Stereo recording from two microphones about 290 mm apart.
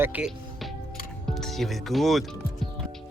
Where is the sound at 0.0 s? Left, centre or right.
Centre.